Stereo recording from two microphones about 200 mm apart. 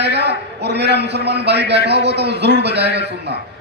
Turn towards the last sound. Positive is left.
turn(degrees=-55)  # may be behind; listen again after turning